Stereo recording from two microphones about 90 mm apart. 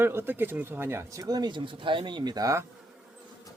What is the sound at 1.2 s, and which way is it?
Speech, 50° right (ahead or behind).